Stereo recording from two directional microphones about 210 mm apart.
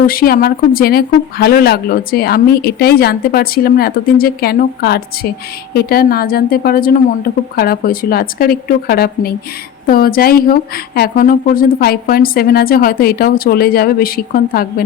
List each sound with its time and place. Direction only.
0.0 s speech: 45° left (ahead or behind)